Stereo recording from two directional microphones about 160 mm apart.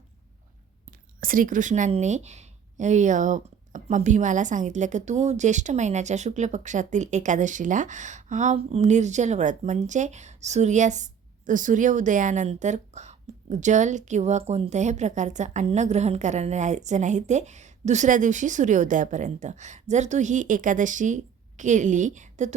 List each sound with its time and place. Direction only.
0.9 s speech: 60° right (ahead or behind)